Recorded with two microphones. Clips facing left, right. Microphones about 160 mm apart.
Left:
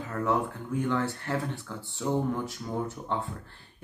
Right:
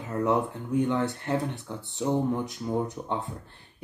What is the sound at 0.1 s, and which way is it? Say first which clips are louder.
Speech: right 3 dB; 20° right (ahead or behind).